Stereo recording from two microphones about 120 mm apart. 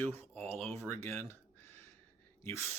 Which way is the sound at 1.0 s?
20° left (ahead or behind).